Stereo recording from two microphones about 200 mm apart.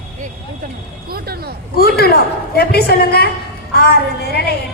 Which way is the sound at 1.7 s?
50° left (ahead or behind).